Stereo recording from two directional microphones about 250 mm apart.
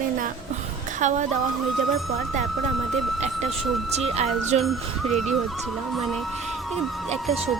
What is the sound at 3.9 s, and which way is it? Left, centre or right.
Speech, right.